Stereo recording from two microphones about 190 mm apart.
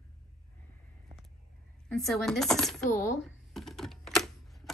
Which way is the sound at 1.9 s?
Centre (ahead or behind).